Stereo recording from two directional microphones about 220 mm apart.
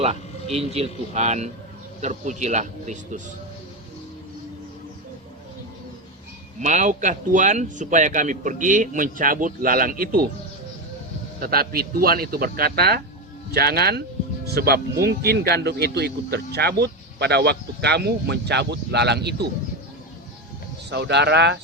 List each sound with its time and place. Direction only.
0.0 s speech: 25° right (ahead or behind)
6.6 s speech: 35° right (ahead or behind)
11.3 s speech: 45° right (ahead or behind)
20.9 s speech: 50° right (ahead or behind)